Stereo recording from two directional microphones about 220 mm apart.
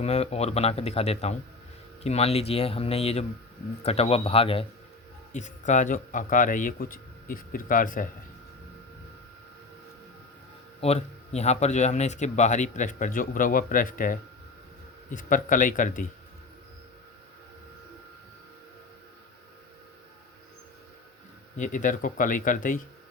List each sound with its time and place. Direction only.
0.0 s a man's voice: 30° left (ahead or behind)
10.8 s a man's voice: 30° left (ahead or behind)
21.6 s a man's voice: 35° left (ahead or behind)